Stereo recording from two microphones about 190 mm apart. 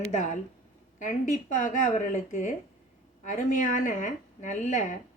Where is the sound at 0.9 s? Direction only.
45° left (ahead or behind).